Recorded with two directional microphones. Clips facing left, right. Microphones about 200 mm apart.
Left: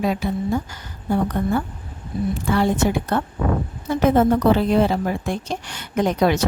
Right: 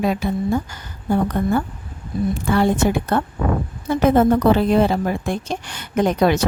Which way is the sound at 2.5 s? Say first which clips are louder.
Right 2 dB; 50° right (ahead or behind).